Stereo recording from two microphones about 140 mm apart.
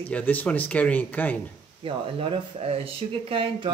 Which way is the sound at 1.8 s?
40° right (ahead or behind).